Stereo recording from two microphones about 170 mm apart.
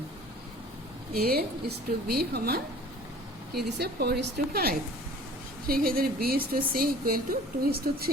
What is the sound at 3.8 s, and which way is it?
A woman's voice, 70° right (ahead or behind).